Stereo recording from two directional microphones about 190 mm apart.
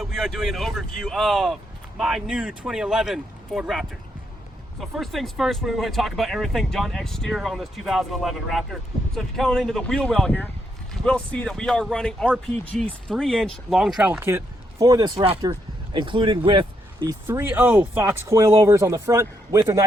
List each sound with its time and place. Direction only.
0.0 s speech: centre (ahead or behind); by 17.2 s 25° right (ahead or behind)
17.2 s speech: 10° right (ahead or behind)